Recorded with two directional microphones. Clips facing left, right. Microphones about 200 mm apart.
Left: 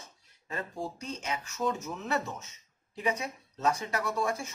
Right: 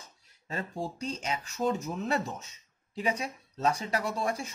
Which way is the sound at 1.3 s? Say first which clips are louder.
Right 2 dB; 30° right (ahead or behind).